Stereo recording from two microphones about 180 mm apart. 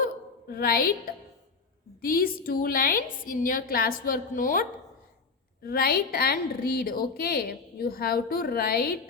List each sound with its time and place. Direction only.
0.0 s a sound: 55° left (ahead or behind)
2.0 s a woman's voice: 55° left (ahead or behind)
5.6 s a woman's voice: 60° left (ahead or behind)